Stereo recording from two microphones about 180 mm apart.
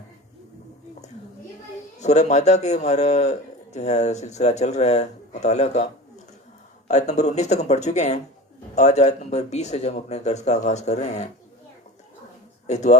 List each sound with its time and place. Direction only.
2.0 s a man's voice: 40° left (ahead or behind)
12.6 s a man's voice: 40° left (ahead or behind)